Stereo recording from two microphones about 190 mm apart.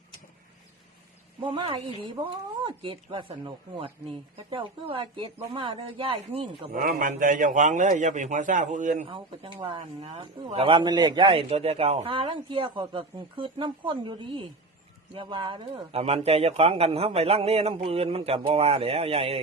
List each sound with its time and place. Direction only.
1.4 s speech: 25° right (ahead or behind)
6.7 s a man's voice: 45° right (ahead or behind)
9.0 s speech: 25° right (ahead or behind)